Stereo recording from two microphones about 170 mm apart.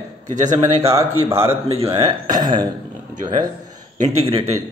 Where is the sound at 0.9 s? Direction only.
15° right (ahead or behind).